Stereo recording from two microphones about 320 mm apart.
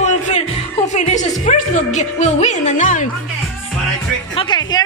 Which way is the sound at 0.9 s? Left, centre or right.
Left.